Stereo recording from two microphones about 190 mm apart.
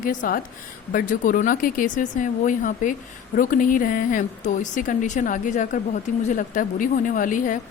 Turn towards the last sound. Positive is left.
turn(degrees=45)  # may be behind; listen again after turning